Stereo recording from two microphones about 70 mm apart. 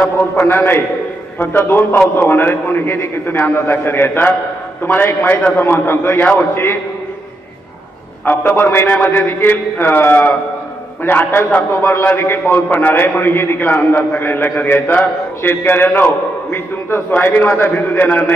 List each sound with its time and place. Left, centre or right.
0.0 s a man's voice: left
8.3 s a man's voice: left